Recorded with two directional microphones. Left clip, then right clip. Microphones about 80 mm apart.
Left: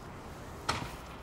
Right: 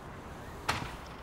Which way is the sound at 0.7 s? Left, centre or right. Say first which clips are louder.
Right 1 dB; right.